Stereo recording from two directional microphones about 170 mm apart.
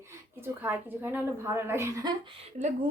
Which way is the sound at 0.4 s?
10° right (ahead or behind).